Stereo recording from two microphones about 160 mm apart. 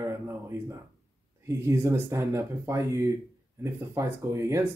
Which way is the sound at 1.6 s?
15° right (ahead or behind).